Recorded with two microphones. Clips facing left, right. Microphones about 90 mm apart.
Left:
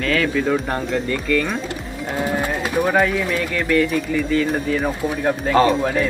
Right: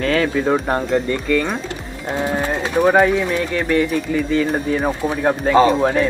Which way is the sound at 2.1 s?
25° right (ahead or behind).